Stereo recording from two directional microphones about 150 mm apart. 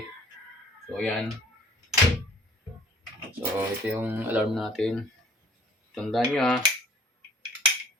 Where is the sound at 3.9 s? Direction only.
10° right (ahead or behind).